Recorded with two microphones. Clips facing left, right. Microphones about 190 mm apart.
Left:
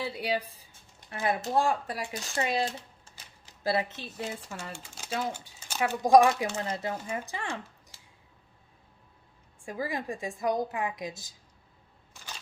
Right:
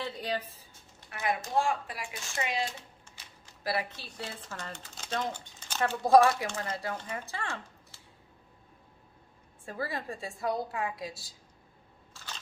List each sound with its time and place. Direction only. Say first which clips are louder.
0.0 s speech: left 3 dB; 10° left (ahead or behind)
1.1 s speech: left 2 dB; 30° left (ahead or behind)
3.6 s speech: left 4 dB; 25° left (ahead or behind)
4.2 s speech: left 3 dB; 10° left (ahead or behind)
6.9 s speech: left 3 dB; 10° left (ahead or behind)
9.6 s speech: left 3 dB; 15° left (ahead or behind)
12.1 s a sound: even; 10° left (ahead or behind)